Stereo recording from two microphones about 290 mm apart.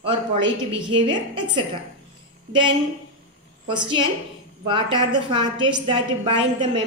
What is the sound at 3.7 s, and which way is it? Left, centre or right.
A woman's voice, centre.